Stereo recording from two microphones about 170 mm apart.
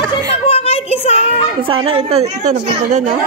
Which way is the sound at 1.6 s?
30° right (ahead or behind).